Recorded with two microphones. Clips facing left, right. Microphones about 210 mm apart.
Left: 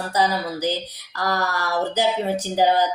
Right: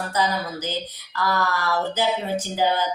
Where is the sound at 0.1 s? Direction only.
35° left (ahead or behind).